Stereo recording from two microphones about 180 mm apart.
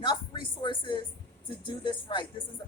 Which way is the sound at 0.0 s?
25° left (ahead or behind).